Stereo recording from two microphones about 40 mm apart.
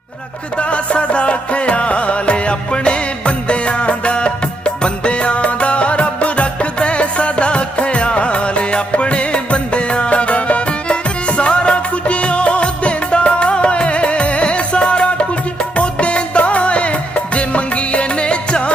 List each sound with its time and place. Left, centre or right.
0.7 s music: left